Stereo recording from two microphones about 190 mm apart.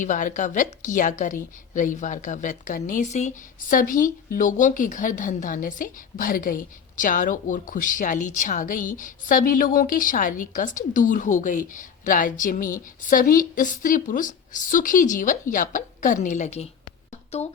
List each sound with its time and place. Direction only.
0.0 s a woman's voice: 40° left (ahead or behind)